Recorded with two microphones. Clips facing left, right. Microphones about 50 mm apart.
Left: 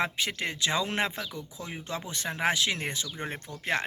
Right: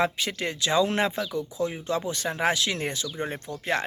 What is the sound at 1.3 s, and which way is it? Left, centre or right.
Speech, right.